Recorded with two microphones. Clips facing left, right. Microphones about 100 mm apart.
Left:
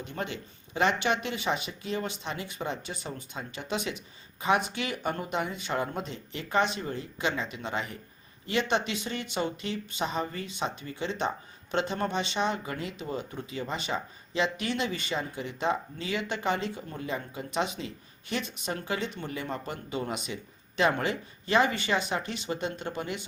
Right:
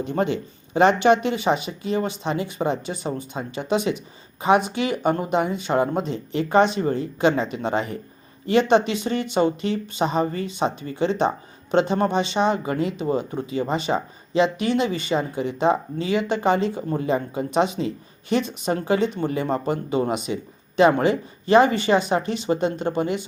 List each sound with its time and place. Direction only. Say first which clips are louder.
0.0 s speech: right 12 dB; 30° right (ahead or behind)